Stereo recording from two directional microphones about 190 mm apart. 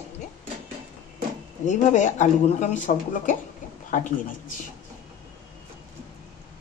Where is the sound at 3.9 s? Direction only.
45° left (ahead or behind).